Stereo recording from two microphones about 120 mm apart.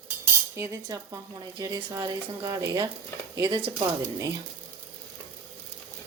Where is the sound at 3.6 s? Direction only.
45° right (ahead or behind).